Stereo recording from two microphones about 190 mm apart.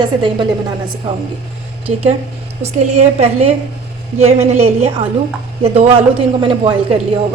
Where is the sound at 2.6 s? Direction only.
35° right (ahead or behind).